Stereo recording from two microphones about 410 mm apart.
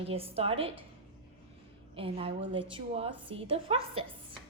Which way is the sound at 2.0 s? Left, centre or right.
Centre.